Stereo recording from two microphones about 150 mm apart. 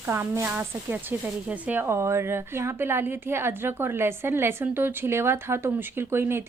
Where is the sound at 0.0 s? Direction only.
15° right (ahead or behind).